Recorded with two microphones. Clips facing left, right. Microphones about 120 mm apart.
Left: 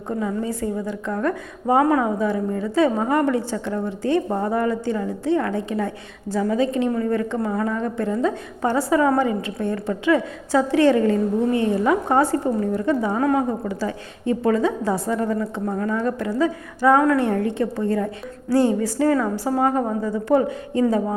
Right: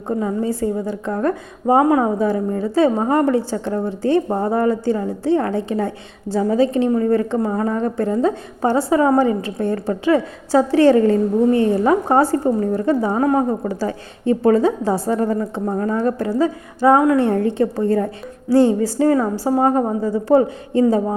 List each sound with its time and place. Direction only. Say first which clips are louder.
0.2 s a woman's voice: right 3 dB; 35° right (ahead or behind)
2.1 s a woman's voice: right 3 dB; 35° right (ahead or behind)